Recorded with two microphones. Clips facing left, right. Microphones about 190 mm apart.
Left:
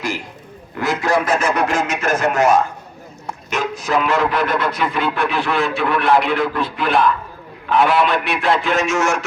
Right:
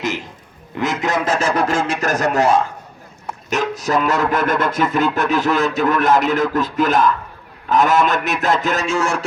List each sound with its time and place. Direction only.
0.8 s a man's voice: 20° right (ahead or behind)